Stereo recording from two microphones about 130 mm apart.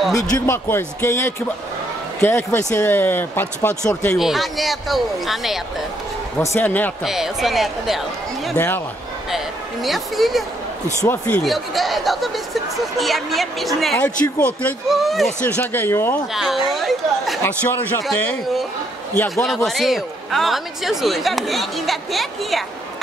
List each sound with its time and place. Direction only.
0.1 s speech: 20° left (ahead or behind)
4.1 s a man's voice: centre (ahead or behind)
6.4 s speech: 20° left (ahead or behind)
7.1 s a man's voice: centre (ahead or behind)
8.5 s speech: 15° left (ahead or behind)
9.8 s a man's voice: centre (ahead or behind)
11.1 s speech: 15° left (ahead or behind)
11.4 s a man's voice: centre (ahead or behind)
15.4 s speech: 15° left (ahead or behind)
16.3 s a man's voice: centre (ahead or behind)
17.4 s speech: 15° left (ahead or behind)
18.0 s a man's voice: centre (ahead or behind)
19.1 s speech: 20° left (ahead or behind)
19.4 s a man's voice: centre (ahead or behind)